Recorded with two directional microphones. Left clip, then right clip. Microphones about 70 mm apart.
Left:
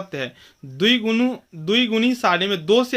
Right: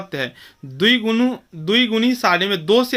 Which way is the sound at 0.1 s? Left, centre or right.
Right.